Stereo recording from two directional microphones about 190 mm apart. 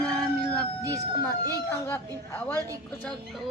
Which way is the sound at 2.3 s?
15° left (ahead or behind).